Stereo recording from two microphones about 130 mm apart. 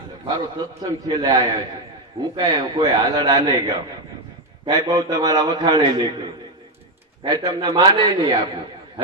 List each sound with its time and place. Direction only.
0.3 s a man's voice: 30° right (ahead or behind)